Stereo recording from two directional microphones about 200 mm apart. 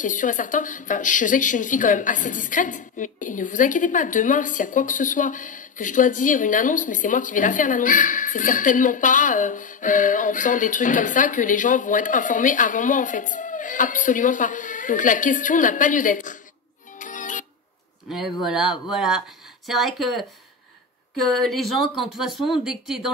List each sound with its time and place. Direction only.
0.0 s a woman's voice: 40° left (ahead or behind)
17.0 s music: 40° left (ahead or behind)
18.1 s speech: centre (ahead or behind)